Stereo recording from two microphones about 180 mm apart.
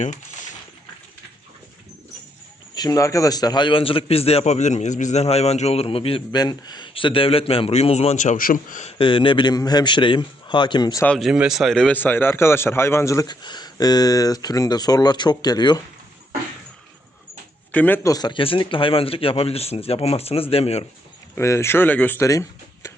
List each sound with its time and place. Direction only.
0.0 s a sound: 45° left (ahead or behind)
2.7 s a man's voice: 20° left (ahead or behind); by 8.9 s 45° left (ahead or behind)
8.9 s speech: 30° left (ahead or behind)
11.0 s speech: 5° left (ahead or behind); by 15.8 s 25° left (ahead or behind)
17.7 s a man's voice: 10° left (ahead or behind); by 20.8 s 35° left (ahead or behind)
21.3 s speech: 15° left (ahead or behind)